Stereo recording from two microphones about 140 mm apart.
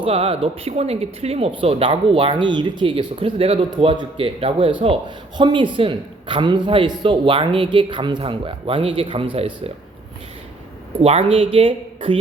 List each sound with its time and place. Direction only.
0.0 s speech: 45° right (ahead or behind)
11.0 s speech: 45° right (ahead or behind)